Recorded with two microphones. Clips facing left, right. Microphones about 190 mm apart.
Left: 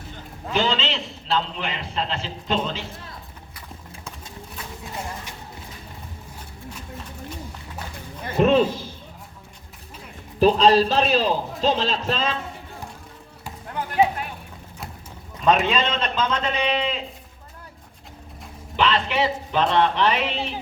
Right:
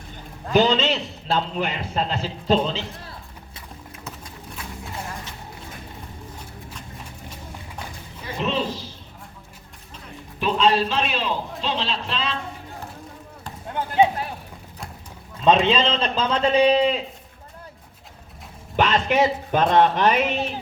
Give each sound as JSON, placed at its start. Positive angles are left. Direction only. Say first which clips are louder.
{"t": 0.5, "sound": "a man's voice", "louder": "right 5 dB", "side_deg": -40}
{"t": 8.2, "sound": "a sound", "louder": "left 8 dB", "side_deg": 50}
{"t": 10.4, "sound": "a man's voice", "louder": "left 4 dB", "side_deg": 35}
{"t": 13.7, "sound": "run", "louder": "right 2 dB", "side_deg": -25}
{"t": 15.4, "sound": "a man's voice", "louder": "right 2 dB", "side_deg": -25}
{"t": 18.8, "sound": "a man's voice", "louder": "right 2 dB", "side_deg": -45}